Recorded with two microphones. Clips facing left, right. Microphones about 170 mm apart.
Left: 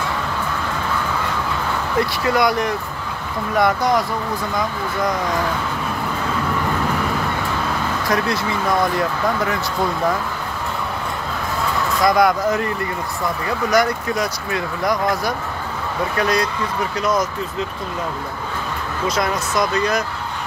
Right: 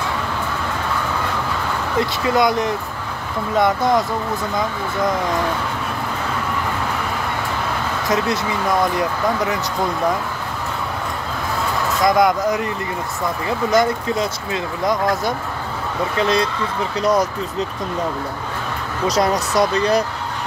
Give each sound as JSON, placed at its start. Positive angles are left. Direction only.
{"t": 2.0, "sound": "speech", "side_deg": -20}
{"t": 8.9, "sound": "speech", "side_deg": -20}
{"t": 12.0, "sound": "speech", "side_deg": -20}
{"t": 19.0, "sound": "speech", "side_deg": -40}